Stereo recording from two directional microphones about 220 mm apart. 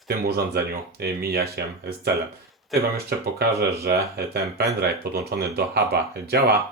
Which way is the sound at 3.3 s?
45° right (ahead or behind).